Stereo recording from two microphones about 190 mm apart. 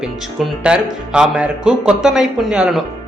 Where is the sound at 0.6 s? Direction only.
5° right (ahead or behind).